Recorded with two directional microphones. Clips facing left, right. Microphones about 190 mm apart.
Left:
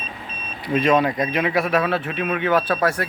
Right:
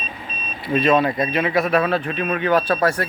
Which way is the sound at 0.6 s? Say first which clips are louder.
Right 1 dB; 15° left (ahead or behind).